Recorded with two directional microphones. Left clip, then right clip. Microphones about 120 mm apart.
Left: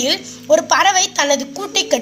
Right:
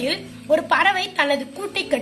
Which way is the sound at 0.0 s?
45° left (ahead or behind).